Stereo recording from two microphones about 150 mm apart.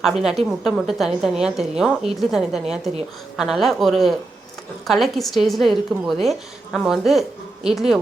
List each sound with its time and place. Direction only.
0.0 s a woman's voice: centre (ahead or behind)